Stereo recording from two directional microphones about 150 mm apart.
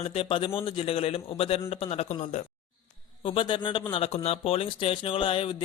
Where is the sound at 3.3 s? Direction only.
35° left (ahead or behind).